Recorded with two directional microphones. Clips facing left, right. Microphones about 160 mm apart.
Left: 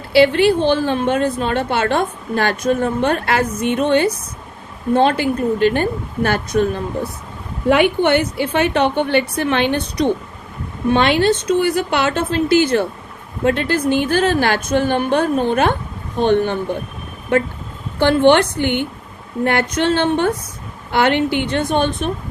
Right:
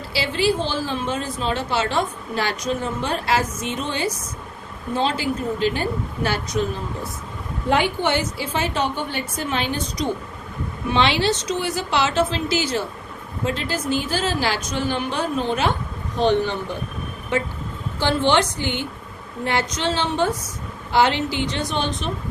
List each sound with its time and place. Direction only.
0.1 s a woman's voice: 60° left (ahead or behind)
10.8 s a woman's voice: 50° left (ahead or behind)